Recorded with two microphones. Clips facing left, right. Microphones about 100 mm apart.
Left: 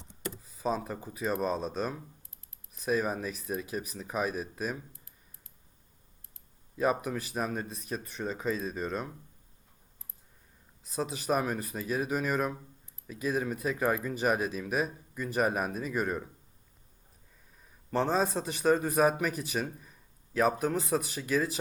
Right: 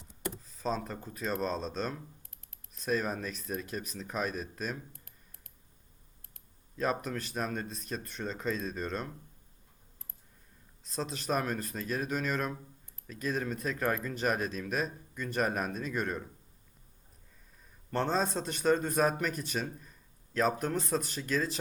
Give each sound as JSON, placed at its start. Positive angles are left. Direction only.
{"t": 0.4, "sound": "a man's voice", "side_deg": 5}
{"t": 4.9, "sound": "clicking", "side_deg": -60}
{"t": 6.7, "sound": "speech", "side_deg": 10}
{"t": 10.8, "sound": "a man's voice", "side_deg": 5}
{"t": 17.9, "sound": "a man's voice", "side_deg": 5}